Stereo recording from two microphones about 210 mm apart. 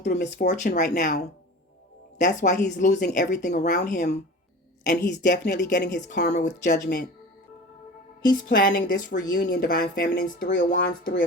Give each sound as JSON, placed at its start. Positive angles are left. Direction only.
{"t": 0.0, "sound": "speech", "side_deg": 45}
{"t": 0.4, "sound": "a woman's voice", "side_deg": 35}
{"t": 5.2, "sound": "speech", "side_deg": 55}
{"t": 8.4, "sound": "a woman's voice", "side_deg": 45}
{"t": 9.3, "sound": "speech", "side_deg": 50}